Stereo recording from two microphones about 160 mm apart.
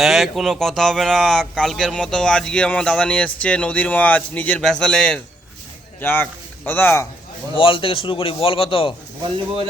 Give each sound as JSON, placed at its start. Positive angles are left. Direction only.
{"t": 0.0, "sound": "a man's voice", "side_deg": 0}
{"t": 7.5, "sound": "a man's voice", "side_deg": 35}